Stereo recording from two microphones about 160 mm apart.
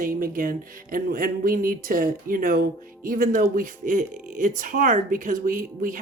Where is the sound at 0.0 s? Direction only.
60° right (ahead or behind).